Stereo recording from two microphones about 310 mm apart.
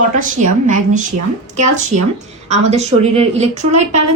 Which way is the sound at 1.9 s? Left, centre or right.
Right.